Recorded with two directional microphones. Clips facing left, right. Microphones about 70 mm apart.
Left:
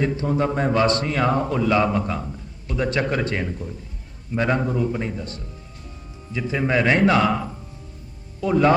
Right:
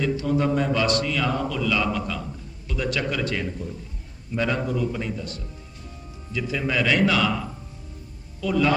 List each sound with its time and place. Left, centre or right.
0.0 s a man's voice: left
8.4 s a man's voice: left